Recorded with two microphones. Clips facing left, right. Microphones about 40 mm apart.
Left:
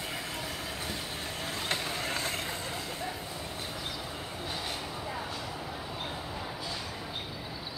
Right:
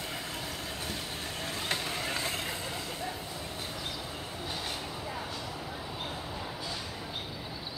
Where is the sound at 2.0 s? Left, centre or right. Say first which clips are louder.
Even; right.